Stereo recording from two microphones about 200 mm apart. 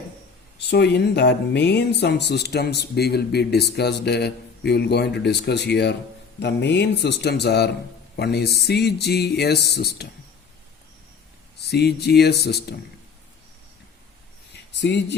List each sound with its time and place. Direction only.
0.7 s speech: 55° left (ahead or behind)
11.7 s speech: 55° left (ahead or behind)
14.8 s speech: 60° left (ahead or behind)